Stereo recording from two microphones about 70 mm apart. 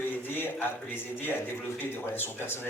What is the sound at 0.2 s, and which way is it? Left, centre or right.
A man's voice, left.